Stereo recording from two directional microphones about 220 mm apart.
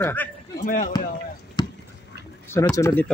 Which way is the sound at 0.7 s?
40° left (ahead or behind).